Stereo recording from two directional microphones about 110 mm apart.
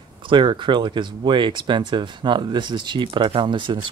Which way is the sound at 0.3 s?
45° right (ahead or behind).